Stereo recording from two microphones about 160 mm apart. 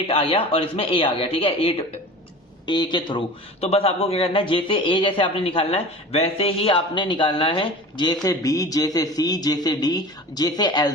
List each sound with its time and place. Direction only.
0.1 s a man's voice: 35° left (ahead or behind)